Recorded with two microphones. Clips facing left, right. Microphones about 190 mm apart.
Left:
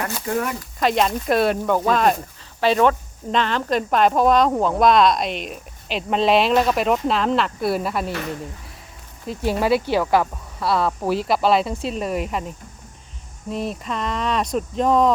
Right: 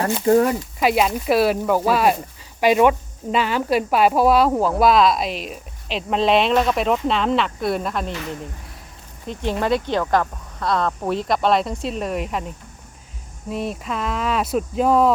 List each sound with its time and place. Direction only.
0.3 s speech: 35° right (ahead or behind)
0.8 s speech: 5° right (ahead or behind)
9.2 s speech: 5° left (ahead or behind)